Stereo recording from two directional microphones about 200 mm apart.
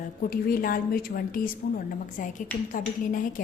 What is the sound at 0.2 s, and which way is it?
A woman's voice, 45° left (ahead or behind).